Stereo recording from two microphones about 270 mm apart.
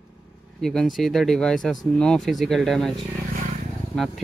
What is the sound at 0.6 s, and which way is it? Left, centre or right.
Speech, centre.